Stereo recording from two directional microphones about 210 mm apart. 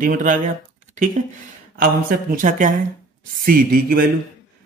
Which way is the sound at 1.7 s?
45° right (ahead or behind).